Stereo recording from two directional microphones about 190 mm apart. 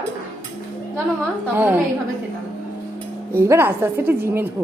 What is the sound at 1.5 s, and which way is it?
Speech, 10° right (ahead or behind).